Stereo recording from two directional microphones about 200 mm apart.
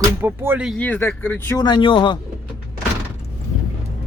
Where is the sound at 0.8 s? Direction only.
10° left (ahead or behind).